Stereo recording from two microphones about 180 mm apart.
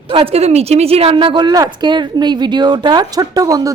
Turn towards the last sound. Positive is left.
turn(degrees=-20)  # may be behind; listen again after turning